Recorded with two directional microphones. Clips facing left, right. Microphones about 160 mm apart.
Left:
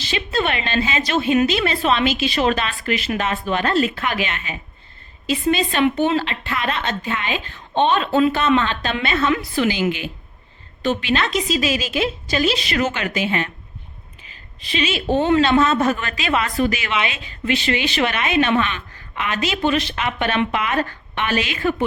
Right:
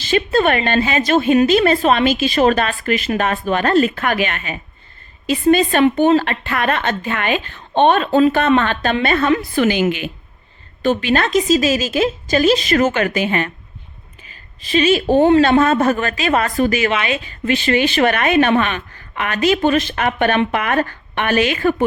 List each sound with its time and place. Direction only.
0.0 s speech: 50° right (ahead or behind)
10.8 s speech: 45° right (ahead or behind)